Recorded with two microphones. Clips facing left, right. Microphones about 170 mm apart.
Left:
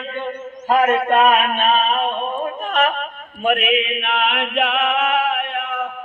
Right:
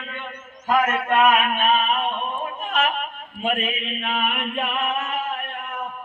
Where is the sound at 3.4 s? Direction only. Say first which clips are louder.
Left 7 dB; 70° left (ahead or behind).